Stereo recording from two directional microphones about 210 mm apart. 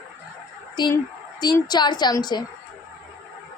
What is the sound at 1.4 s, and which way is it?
A woman's voice, 20° left (ahead or behind).